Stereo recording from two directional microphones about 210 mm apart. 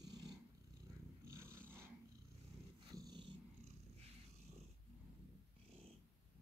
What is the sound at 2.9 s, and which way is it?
Cat, 20° right (ahead or behind).